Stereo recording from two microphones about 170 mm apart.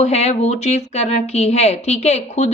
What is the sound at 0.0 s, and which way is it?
A woman's voice, 40° left (ahead or behind).